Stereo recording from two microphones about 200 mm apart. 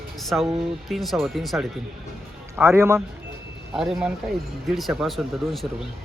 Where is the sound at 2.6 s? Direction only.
15° right (ahead or behind).